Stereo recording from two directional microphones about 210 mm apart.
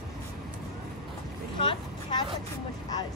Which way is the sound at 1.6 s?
20° left (ahead or behind).